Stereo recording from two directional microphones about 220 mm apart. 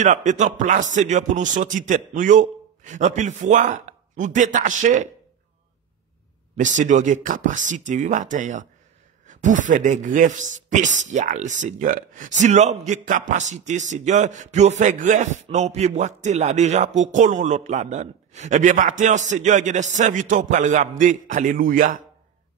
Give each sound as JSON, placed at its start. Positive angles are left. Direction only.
{"t": 0.0, "sound": "speech", "side_deg": -35}
{"t": 6.5, "sound": "speech", "side_deg": -35}